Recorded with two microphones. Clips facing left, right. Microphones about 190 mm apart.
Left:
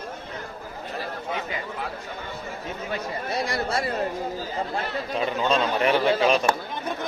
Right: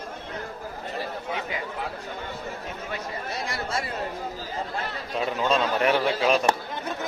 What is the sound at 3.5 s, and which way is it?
Speech, 40° left (ahead or behind).